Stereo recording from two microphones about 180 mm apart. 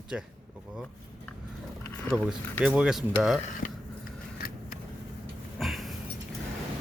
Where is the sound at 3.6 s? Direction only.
50° left (ahead or behind).